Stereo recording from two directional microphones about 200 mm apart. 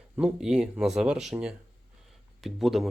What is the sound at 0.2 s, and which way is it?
Speech, 5° right (ahead or behind).